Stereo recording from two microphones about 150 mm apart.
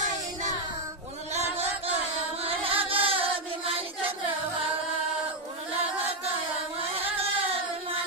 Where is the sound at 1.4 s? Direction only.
45° right (ahead or behind).